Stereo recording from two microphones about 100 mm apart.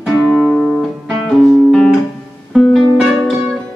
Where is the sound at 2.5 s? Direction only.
Centre (ahead or behind).